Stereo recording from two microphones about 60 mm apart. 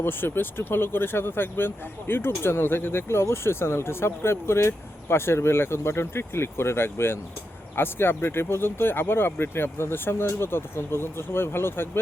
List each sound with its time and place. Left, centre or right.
0.0 s speech: left